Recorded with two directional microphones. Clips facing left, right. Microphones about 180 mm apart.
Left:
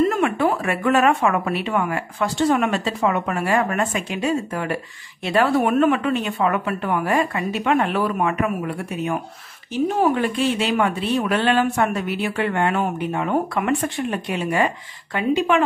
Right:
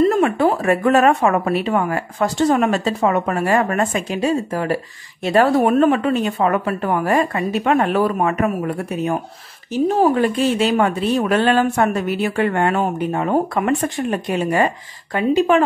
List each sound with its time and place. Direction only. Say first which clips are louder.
0.0 s speech: right 4 dB; 30° right (ahead or behind)
10.2 s speech: right 4 dB; 40° right (ahead or behind)